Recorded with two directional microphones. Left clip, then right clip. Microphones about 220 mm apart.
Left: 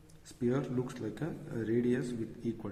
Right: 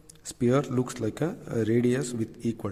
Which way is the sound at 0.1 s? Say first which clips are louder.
Right 9 dB; 55° right (ahead or behind).